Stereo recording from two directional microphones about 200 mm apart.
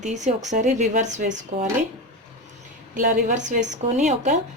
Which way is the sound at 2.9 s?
40° right (ahead or behind).